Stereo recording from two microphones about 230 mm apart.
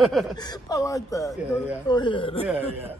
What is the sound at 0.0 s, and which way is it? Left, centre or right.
Speech, centre.